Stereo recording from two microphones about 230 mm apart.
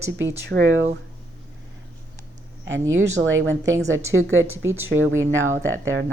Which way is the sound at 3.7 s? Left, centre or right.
Centre.